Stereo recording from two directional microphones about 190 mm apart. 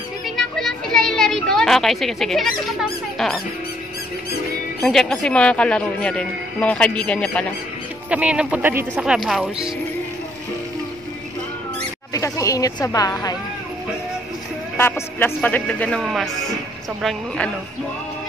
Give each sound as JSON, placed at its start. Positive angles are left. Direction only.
{"t": 0.6, "sound": "a sound", "side_deg": 5}
{"t": 4.8, "sound": "speech", "side_deg": 0}
{"t": 8.1, "sound": "speech", "side_deg": -5}
{"t": 12.1, "sound": "speech", "side_deg": 15}
{"t": 14.8, "sound": "speech", "side_deg": 10}